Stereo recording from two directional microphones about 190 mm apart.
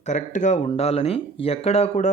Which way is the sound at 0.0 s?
40° left (ahead or behind).